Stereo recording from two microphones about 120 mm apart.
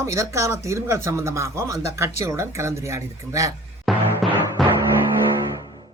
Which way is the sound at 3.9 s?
Centre (ahead or behind).